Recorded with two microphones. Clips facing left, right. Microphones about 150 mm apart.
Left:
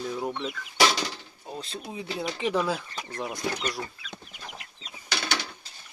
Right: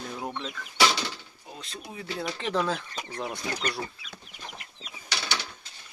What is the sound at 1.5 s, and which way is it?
Speech, 30° left (ahead or behind).